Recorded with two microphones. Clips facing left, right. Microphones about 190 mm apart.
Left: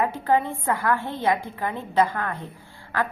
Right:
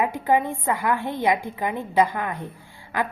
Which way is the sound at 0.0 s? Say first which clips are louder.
Right 1 dB; 15° right (ahead or behind).